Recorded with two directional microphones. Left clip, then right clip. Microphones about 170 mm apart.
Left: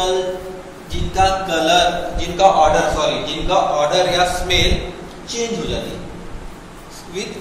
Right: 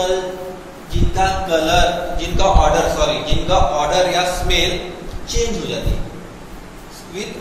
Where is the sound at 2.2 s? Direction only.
10° left (ahead or behind).